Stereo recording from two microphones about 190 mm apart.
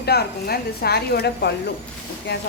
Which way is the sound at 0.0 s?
55° left (ahead or behind).